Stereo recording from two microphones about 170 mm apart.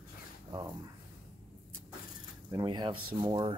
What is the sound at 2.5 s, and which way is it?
Speech, 25° right (ahead or behind).